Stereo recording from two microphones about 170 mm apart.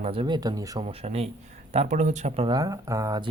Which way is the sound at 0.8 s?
35° right (ahead or behind).